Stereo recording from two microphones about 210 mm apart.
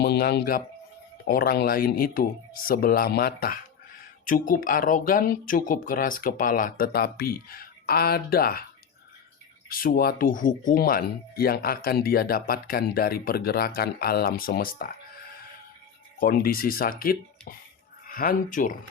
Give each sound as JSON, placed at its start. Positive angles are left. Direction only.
{"t": 0.0, "sound": "speech", "side_deg": 50}
{"t": 9.6, "sound": "speech", "side_deg": 45}
{"t": 16.2, "sound": "speech", "side_deg": 45}